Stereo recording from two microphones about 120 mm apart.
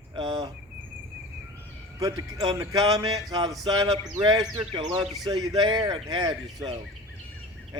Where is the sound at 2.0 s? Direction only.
30° right (ahead or behind).